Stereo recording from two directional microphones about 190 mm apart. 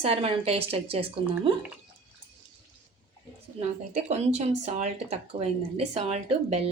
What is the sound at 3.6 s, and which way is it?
Speech, 35° right (ahead or behind).